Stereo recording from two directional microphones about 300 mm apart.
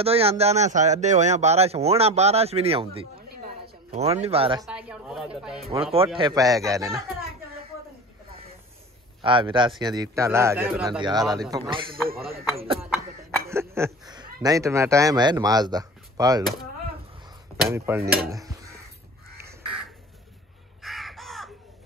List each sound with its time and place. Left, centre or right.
0.0 s a man's voice: centre
3.2 s a sound: right
4.6 s speech: centre
5.6 s a man's voice: centre
9.2 s speech: centre
13.5 s speech: centre
17.6 s speech: centre
20.8 s crow: centre